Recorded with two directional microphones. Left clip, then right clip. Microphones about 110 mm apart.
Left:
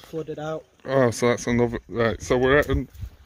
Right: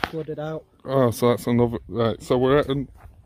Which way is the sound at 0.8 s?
25° right (ahead or behind).